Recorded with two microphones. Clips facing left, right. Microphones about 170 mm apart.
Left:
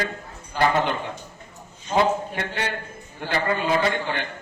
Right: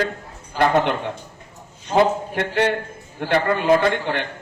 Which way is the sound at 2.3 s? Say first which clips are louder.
Right 8 dB; 65° right (ahead or behind).